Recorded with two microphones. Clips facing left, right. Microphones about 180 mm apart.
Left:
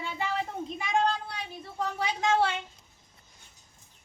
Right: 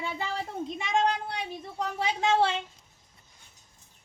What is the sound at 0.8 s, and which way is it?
Speech, 20° right (ahead or behind).